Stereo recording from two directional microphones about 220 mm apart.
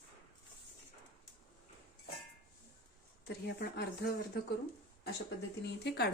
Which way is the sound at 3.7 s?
45° left (ahead or behind).